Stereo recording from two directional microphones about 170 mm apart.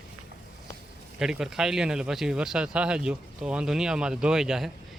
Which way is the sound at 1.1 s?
5° right (ahead or behind).